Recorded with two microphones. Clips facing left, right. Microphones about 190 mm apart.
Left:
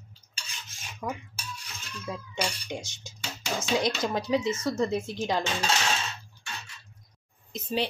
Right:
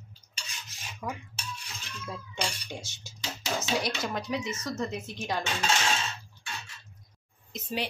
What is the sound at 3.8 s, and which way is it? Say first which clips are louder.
Speech: left 4 dB; 30° left (ahead or behind).